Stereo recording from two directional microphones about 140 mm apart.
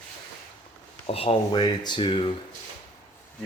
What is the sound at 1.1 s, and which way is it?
A man's voice, 45° left (ahead or behind).